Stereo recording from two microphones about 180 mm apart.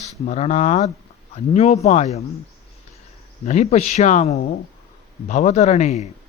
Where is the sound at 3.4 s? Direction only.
40° left (ahead or behind).